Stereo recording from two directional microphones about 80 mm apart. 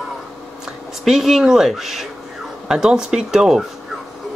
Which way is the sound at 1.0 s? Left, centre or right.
Centre.